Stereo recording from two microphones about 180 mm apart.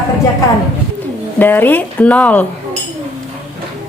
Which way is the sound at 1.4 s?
10° left (ahead or behind).